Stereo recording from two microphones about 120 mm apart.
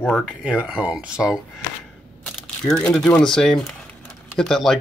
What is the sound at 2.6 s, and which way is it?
Speech, 5° left (ahead or behind).